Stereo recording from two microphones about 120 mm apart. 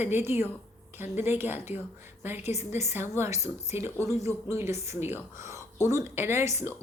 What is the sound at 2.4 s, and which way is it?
Speech, 65° left (ahead or behind).